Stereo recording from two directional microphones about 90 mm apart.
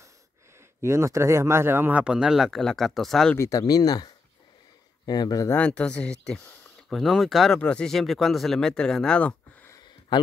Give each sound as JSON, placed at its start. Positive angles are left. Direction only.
{"t": 0.8, "sound": "speech", "side_deg": -35}
{"t": 2.0, "sound": "speech", "side_deg": -10}
{"t": 3.3, "sound": "speech", "side_deg": 40}
{"t": 5.6, "sound": "speech", "side_deg": 10}